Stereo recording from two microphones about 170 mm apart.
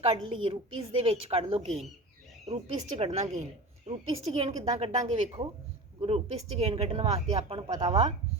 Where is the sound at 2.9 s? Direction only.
35° right (ahead or behind).